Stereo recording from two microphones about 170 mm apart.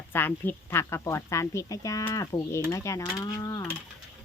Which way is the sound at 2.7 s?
20° left (ahead or behind).